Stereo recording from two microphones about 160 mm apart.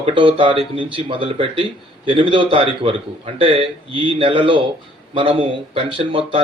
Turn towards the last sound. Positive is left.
turn(degrees=-35)  # may be behind; listen again after turning